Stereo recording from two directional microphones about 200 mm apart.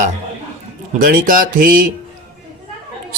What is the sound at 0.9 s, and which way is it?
Speech, 45° right (ahead or behind).